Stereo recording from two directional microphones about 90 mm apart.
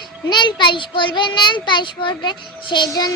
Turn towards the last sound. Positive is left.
turn(degrees=45)  # may be behind; listen again after turning